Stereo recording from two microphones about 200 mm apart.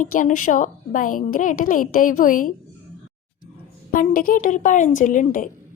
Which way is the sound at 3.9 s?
45° left (ahead or behind).